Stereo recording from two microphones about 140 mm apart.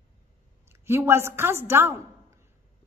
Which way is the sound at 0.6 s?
15° right (ahead or behind).